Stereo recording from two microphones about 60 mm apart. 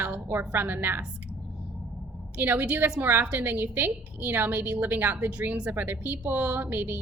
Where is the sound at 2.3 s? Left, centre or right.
Right.